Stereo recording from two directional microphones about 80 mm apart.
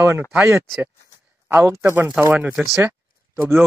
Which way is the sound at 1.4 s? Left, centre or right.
Right.